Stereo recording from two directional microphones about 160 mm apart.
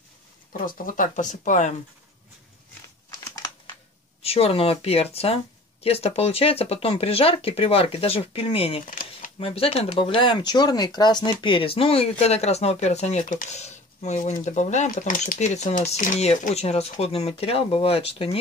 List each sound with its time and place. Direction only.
0.5 s speech: 60° left (ahead or behind)
3.1 s crumpling: 20° left (ahead or behind)
4.2 s speech: 40° left (ahead or behind)
8.8 s a sound: 60° left (ahead or behind)
9.4 s speech: 35° left (ahead or behind)